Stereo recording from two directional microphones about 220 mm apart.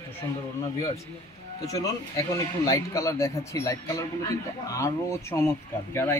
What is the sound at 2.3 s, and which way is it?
Speech, 15° left (ahead or behind).